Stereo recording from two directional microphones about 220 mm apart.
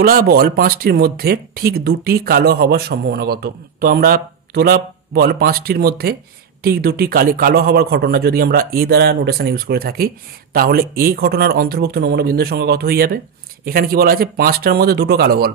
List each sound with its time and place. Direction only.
0.0 s a man's voice: 40° right (ahead or behind)